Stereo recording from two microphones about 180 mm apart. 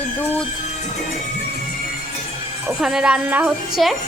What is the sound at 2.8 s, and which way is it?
A woman's voice, 5° right (ahead or behind).